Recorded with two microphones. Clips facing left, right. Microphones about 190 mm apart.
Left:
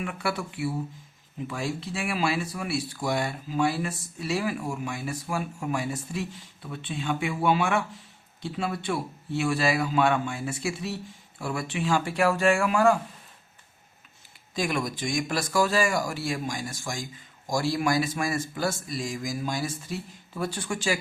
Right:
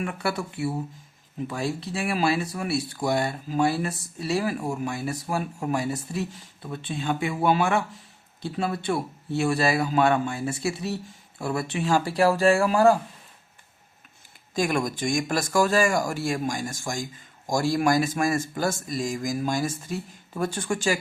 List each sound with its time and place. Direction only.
0.0 s speech: 40° right (ahead or behind)
14.5 s speech: 45° right (ahead or behind)